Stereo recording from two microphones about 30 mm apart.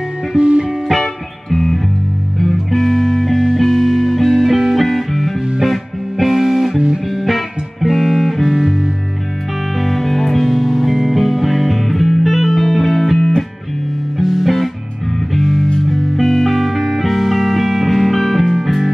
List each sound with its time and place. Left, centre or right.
0.4 s music: right
0.9 s music: centre
9.8 s music: centre
14.1 s music: centre